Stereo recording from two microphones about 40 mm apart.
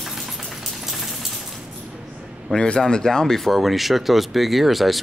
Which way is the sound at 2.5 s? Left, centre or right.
Left.